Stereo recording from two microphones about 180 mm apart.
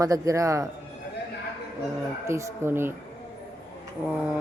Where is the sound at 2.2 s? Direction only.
15° right (ahead or behind).